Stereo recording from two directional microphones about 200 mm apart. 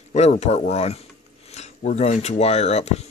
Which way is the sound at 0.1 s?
35° left (ahead or behind).